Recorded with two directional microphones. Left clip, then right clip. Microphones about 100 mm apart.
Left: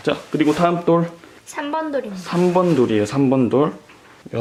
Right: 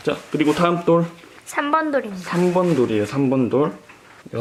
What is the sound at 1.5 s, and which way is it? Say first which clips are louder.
Speech: right 4 dB; 45° right (ahead or behind).